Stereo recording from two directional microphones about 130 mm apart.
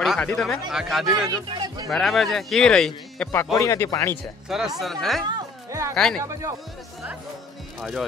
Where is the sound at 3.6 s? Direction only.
25° left (ahead or behind).